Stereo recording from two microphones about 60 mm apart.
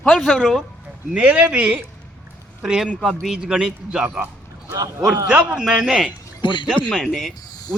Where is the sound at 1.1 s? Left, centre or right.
Right.